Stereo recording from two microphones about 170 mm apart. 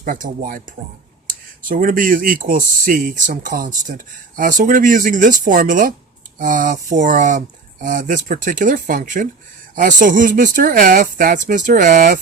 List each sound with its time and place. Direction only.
0.0 s speech: 55° right (ahead or behind)